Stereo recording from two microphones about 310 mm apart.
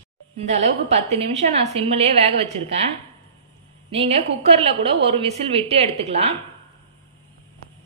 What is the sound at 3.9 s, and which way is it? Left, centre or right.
A woman's voice, centre.